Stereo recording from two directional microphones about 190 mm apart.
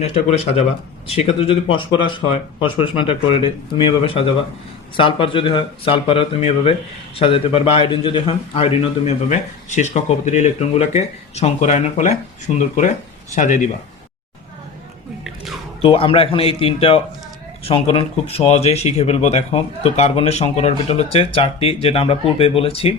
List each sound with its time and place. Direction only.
0.0 s speech: 35° left (ahead or behind)
15.8 s speech: 30° left (ahead or behind)